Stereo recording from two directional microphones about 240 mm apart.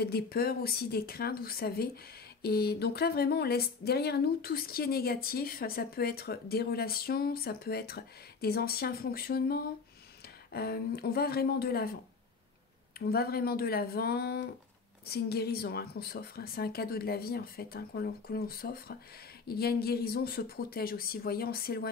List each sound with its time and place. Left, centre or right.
0.0 s speech: left
13.0 s speech: left